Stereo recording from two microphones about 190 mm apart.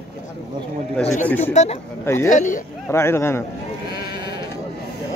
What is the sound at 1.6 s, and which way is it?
Speech, 35° left (ahead or behind).